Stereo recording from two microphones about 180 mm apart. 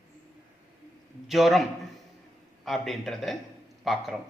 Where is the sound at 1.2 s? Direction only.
Centre (ahead or behind).